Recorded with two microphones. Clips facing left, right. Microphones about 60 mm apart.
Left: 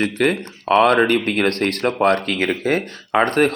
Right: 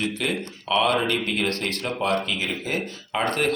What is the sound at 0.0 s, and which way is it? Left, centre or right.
Speech, left.